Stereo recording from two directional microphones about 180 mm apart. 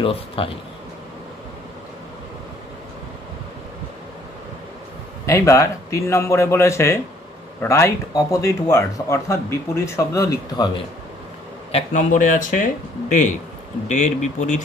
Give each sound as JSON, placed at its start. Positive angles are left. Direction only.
{"t": 0.0, "sound": "speech", "side_deg": 30}
{"t": 5.2, "sound": "speech", "side_deg": 15}
{"t": 11.7, "sound": "speech", "side_deg": 45}
{"t": 13.8, "sound": "speech", "side_deg": 40}